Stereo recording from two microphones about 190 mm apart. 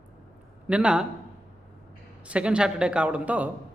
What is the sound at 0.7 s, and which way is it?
Speech, 5° right (ahead or behind).